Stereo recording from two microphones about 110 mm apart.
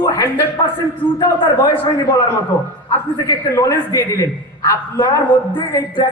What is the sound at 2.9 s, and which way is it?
Speech, 40° left (ahead or behind).